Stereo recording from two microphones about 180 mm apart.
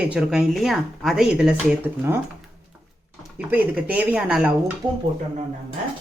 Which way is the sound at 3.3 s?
10° right (ahead or behind).